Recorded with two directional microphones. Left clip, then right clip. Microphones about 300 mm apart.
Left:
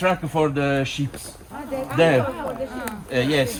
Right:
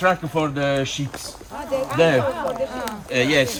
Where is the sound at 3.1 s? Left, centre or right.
Right.